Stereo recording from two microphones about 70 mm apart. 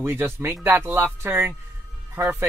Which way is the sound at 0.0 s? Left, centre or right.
Right.